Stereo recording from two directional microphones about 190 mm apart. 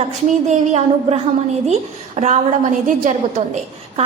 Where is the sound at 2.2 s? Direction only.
40° right (ahead or behind).